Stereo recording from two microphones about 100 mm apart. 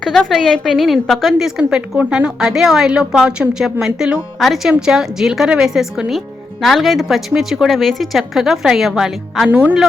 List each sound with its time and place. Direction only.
0.0 s a woman's voice: 5° left (ahead or behind)
9.5 s speech: 15° right (ahead or behind)